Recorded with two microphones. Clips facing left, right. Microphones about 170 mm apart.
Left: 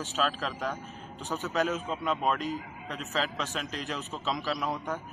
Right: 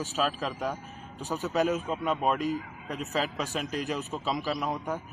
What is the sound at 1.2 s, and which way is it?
Speech, 40° right (ahead or behind).